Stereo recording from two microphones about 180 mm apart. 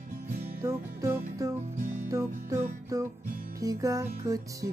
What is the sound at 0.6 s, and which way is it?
Music, 15° right (ahead or behind).